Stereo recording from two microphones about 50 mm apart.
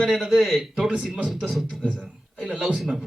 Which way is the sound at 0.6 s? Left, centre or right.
Right.